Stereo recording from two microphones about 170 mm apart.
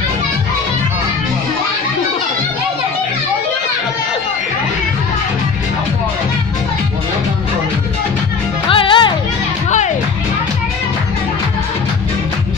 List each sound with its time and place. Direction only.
8.6 s music: 30° left (ahead or behind)